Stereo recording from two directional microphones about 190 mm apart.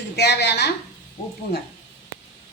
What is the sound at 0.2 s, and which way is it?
Speech, 60° left (ahead or behind).